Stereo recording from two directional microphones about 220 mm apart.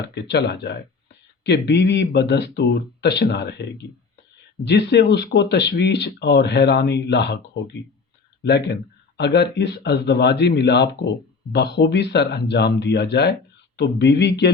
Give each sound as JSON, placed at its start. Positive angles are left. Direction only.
{"t": 0.1, "sound": "speech", "side_deg": 50}